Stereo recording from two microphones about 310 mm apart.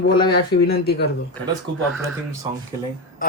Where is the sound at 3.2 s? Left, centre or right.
Left.